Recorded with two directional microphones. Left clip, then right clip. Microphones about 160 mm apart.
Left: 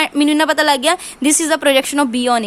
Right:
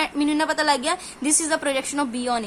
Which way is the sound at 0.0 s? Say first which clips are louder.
Left 8 dB; 50° left (ahead or behind).